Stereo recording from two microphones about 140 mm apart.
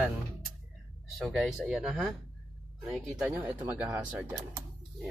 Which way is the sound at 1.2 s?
Centre (ahead or behind).